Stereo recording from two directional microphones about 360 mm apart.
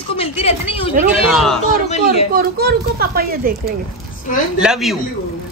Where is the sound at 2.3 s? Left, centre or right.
Right.